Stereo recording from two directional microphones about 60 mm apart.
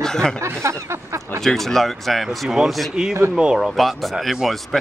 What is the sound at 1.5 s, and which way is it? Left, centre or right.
A man's voice, centre.